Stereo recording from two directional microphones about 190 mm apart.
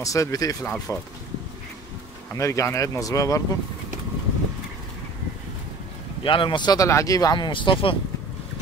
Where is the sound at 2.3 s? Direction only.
15° left (ahead or behind).